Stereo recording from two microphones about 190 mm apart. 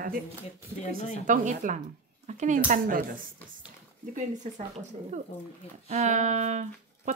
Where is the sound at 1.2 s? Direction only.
40° right (ahead or behind).